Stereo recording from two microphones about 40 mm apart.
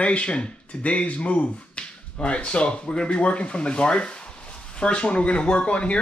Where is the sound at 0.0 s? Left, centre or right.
Left.